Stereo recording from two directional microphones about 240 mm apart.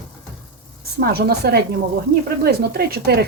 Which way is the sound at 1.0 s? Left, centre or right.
Right.